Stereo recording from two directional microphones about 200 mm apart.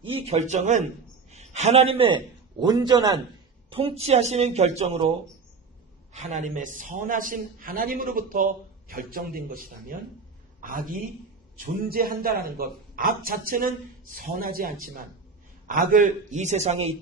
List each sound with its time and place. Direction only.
0.0 s a man's voice: 30° right (ahead or behind)
6.1 s a man's voice: 35° right (ahead or behind)